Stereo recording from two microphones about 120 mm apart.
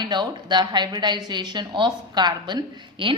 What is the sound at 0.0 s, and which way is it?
A woman's voice, 40° right (ahead or behind).